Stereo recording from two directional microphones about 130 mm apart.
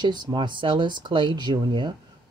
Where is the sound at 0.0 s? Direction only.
35° right (ahead or behind).